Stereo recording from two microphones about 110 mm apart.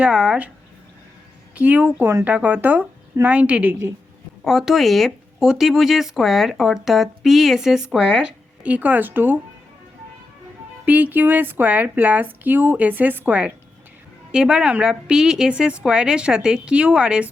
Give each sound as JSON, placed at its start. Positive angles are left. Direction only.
{"t": 0.0, "sound": "a woman's voice", "side_deg": -5}
{"t": 1.5, "sound": "a woman's voice", "side_deg": -15}
{"t": 4.4, "sound": "speech", "side_deg": 0}
{"t": 10.8, "sound": "a woman's voice", "side_deg": -15}